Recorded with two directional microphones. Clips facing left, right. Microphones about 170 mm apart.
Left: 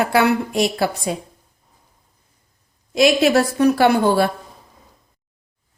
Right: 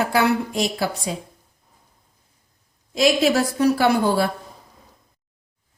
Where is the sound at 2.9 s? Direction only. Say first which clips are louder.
Left 3 dB; 65° left (ahead or behind).